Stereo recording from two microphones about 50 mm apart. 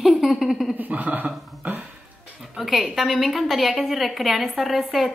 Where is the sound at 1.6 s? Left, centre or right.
Right.